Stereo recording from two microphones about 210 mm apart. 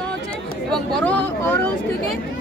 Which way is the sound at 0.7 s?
5° left (ahead or behind).